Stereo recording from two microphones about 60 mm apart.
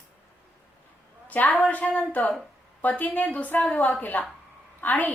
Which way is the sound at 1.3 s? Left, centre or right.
Left.